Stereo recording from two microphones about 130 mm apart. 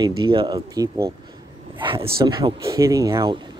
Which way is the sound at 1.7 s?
40° right (ahead or behind).